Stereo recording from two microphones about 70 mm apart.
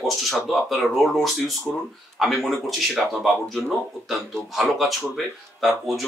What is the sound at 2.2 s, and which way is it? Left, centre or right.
Speech, centre.